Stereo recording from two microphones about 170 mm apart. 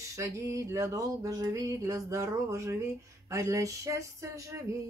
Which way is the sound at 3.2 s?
20° right (ahead or behind).